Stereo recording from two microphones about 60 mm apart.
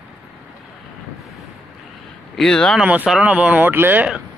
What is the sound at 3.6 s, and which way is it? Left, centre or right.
Speech, right.